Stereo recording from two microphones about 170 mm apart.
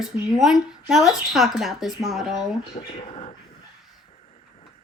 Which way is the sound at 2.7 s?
35° left (ahead or behind).